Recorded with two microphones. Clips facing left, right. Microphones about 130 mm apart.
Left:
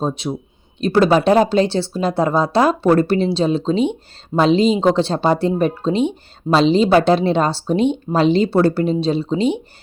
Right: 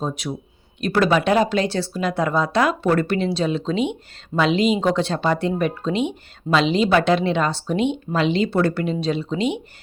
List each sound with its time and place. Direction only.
0.0 s speech: 30° left (ahead or behind)